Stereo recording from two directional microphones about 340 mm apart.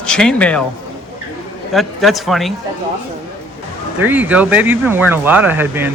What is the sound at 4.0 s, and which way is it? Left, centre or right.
Speech, centre.